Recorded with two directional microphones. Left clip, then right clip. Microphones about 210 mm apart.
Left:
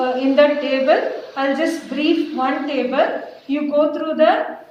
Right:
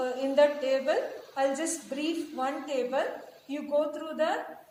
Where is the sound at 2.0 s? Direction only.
50° right (ahead or behind).